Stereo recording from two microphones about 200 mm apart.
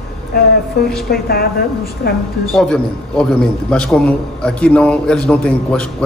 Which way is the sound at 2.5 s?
5° left (ahead or behind).